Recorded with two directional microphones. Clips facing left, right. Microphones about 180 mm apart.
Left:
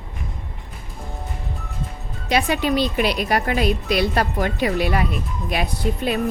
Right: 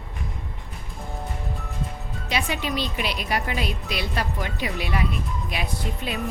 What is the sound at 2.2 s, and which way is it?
Speech, 45° left (ahead or behind).